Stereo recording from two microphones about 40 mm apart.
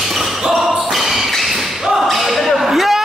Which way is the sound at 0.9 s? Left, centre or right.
Centre.